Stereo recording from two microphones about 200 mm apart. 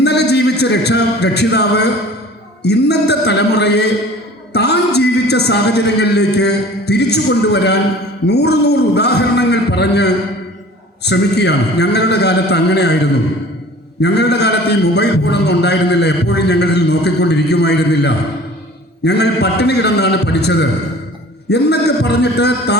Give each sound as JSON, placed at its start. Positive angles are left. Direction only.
{"t": 0.0, "sound": "a man's voice", "side_deg": 55}
{"t": 14.0, "sound": "a man's voice", "side_deg": 55}